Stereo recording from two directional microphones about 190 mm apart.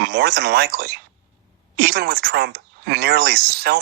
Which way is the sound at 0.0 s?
55° right (ahead or behind).